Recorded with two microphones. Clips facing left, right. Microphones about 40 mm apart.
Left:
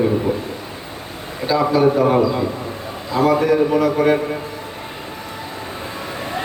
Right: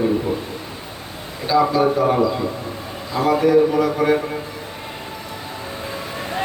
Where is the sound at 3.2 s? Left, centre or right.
Left.